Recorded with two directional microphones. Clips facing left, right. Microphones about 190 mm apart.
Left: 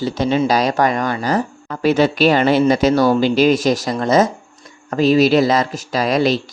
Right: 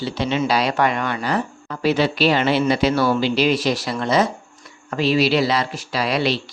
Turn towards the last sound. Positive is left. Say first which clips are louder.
# left 5 dB
turn(degrees=45)  # may be behind; listen again after turning